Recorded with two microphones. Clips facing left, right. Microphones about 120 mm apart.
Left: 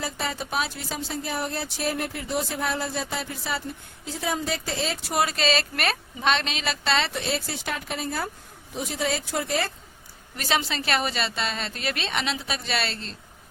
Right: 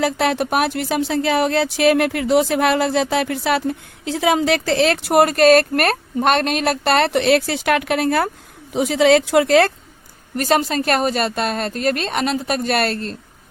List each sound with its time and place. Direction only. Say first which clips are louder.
0.0 s speech: right 12 dB; 70° right (ahead or behind)
8.7 s speech: right 14 dB; 90° right
10.3 s a woman's voice: right 9 dB; 50° right (ahead or behind)